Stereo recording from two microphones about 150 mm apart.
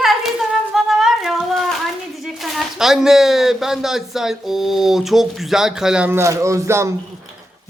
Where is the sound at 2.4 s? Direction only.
Centre (ahead or behind).